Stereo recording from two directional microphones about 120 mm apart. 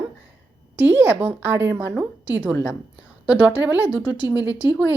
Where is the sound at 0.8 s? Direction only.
15° right (ahead or behind).